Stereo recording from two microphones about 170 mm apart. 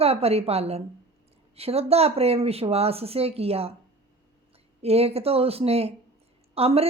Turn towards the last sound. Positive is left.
turn(degrees=-35)  # may be behind; listen again after turning